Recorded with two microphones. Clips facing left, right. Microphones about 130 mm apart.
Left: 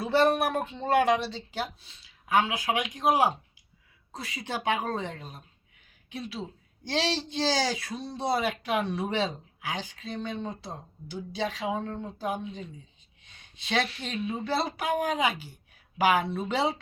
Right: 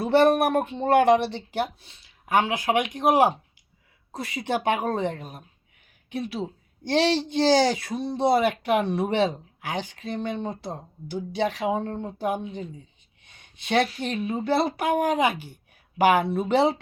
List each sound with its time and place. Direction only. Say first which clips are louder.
0.0 s speech: right 5 dB; 55° right (ahead or behind)
13.2 s a sound: right 5 dB; 55° right (ahead or behind)
13.9 s speech: right 5 dB; 50° right (ahead or behind)